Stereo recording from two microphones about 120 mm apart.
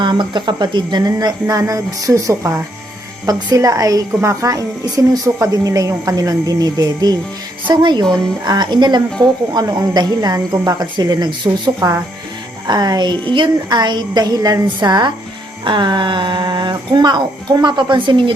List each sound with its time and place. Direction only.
0.0 s speech: 40° right (ahead or behind)